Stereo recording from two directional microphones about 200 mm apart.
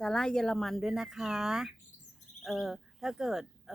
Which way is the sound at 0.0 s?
5° left (ahead or behind).